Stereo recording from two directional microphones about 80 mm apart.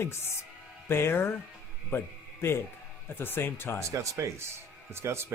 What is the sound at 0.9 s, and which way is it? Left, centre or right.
Speech, left.